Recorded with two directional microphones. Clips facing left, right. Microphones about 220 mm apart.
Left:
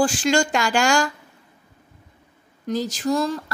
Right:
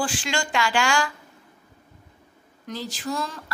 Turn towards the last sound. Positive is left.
turn(degrees=40)  # may be behind; listen again after turning